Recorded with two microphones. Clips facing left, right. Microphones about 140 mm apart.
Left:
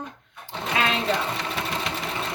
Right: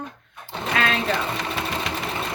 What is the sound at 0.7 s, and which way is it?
Speech, 20° left (ahead or behind).